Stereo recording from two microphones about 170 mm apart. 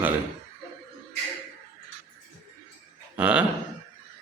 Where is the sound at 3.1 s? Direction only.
10° right (ahead or behind).